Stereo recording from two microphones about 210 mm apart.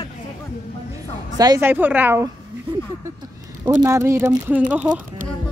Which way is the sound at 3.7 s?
15° right (ahead or behind).